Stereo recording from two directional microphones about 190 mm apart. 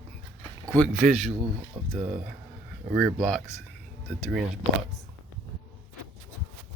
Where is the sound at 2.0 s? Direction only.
45° right (ahead or behind).